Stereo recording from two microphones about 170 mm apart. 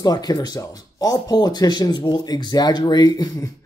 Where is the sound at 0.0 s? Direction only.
20° left (ahead or behind).